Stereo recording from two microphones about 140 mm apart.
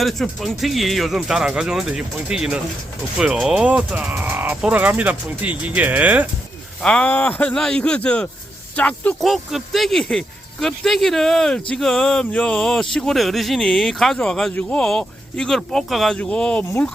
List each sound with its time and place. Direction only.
0.0 s speech: centre (ahead or behind)
6.8 s speech: 5° left (ahead or behind)